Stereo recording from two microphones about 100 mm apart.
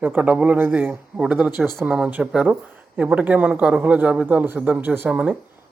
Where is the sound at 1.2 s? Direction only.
5° right (ahead or behind).